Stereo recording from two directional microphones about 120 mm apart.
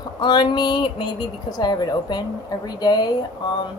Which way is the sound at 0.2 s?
40° left (ahead or behind).